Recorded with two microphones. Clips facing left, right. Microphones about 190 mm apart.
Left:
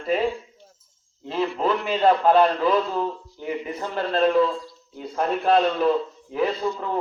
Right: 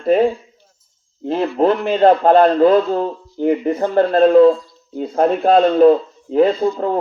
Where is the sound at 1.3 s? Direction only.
50° right (ahead or behind).